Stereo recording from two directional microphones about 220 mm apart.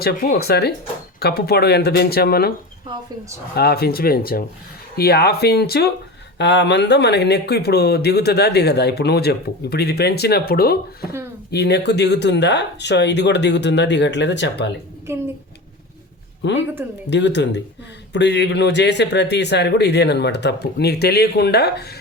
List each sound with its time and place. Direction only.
0.0 s speech: 45° left (ahead or behind)
3.5 s speech: 45° left (ahead or behind)
15.1 s a child's voice: 10° right (ahead or behind)
16.4 s speech: 55° left (ahead or behind)